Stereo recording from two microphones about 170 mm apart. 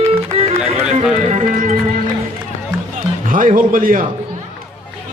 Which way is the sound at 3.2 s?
55° right (ahead or behind).